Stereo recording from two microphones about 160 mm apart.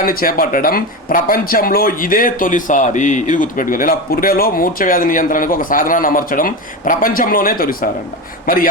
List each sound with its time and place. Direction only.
0.0 s speech: 65° left (ahead or behind)